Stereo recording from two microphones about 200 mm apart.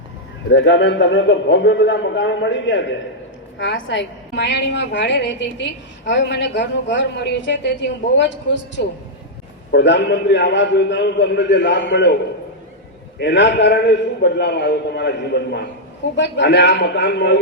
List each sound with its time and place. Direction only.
0.5 s a woman's voice: 65° left (ahead or behind)
13.1 s a woman's voice: 60° left (ahead or behind)